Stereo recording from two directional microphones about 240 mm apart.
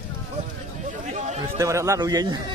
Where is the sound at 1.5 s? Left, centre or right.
Centre.